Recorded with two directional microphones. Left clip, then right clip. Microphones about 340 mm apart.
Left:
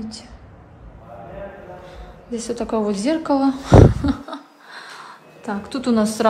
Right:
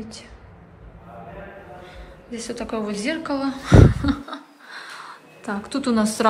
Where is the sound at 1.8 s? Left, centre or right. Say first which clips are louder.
Left 5 dB; centre.